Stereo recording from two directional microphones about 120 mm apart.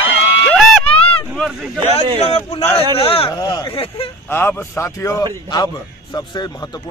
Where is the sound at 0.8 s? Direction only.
50° left (ahead or behind).